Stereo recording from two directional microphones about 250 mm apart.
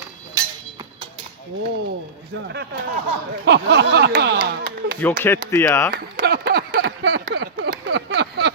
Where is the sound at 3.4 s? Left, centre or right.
Right.